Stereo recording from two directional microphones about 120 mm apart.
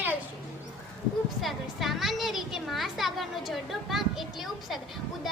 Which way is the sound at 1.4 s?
Centre (ahead or behind).